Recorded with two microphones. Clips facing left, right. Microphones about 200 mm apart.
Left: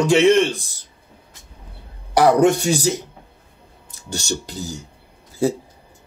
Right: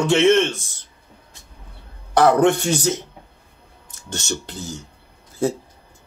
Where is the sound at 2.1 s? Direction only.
10° left (ahead or behind).